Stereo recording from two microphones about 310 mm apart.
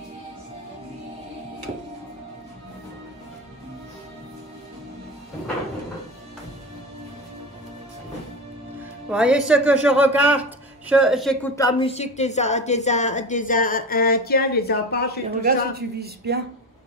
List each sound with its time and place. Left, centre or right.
9.1 s speech: centre; by 15.1 s left
15.4 s a man's voice: right